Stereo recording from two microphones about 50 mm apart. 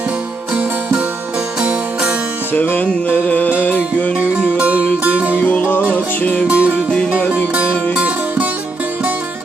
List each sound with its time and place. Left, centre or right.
1.6 s music: right
2.5 s music: left
2.8 s music: left
4.2 s music: right
5.4 s music: left
5.9 s music: left
6.5 s music: right
7.9 s music: right